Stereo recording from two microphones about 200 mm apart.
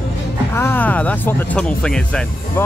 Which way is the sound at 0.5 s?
10° left (ahead or behind).